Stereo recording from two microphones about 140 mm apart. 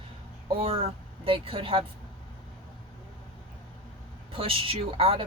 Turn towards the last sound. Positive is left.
turn(degrees=-40)  # may be behind; listen again after turning